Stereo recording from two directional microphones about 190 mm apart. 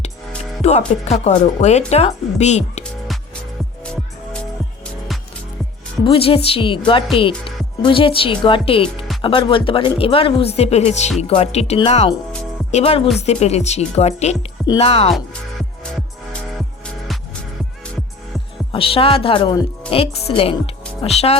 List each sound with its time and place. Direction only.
0.6 s speech: 35° left (ahead or behind)
6.1 s speech: 30° left (ahead or behind)
18.7 s speech: 30° left (ahead or behind)